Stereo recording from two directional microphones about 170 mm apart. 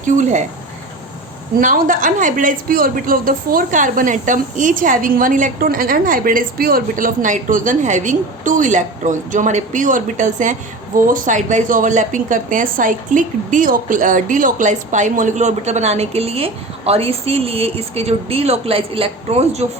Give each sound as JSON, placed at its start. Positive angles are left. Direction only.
{"t": 0.0, "sound": "a woman's voice", "side_deg": -45}
{"t": 1.5, "sound": "a woman's voice", "side_deg": -55}